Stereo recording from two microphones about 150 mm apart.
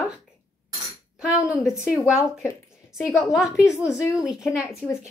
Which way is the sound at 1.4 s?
5° right (ahead or behind).